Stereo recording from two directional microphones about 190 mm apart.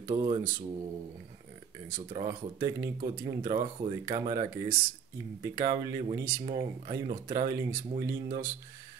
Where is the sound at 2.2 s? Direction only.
25° right (ahead or behind).